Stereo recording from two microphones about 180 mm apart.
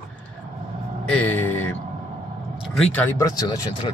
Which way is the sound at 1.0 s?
10° left (ahead or behind).